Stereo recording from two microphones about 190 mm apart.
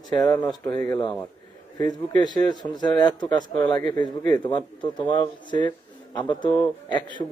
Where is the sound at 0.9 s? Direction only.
25° left (ahead or behind).